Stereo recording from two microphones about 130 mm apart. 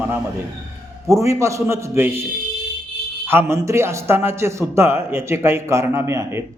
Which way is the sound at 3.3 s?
20° right (ahead or behind).